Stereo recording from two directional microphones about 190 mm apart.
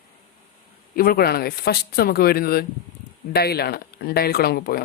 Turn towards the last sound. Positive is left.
turn(degrees=55)  # may be behind; listen again after turning